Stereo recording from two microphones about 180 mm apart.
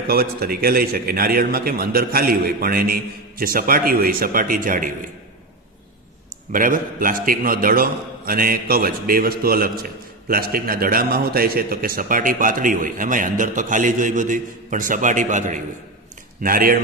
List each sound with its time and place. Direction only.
0.1 s a man's voice: 55° right (ahead or behind)
6.5 s a man's voice: 50° right (ahead or behind)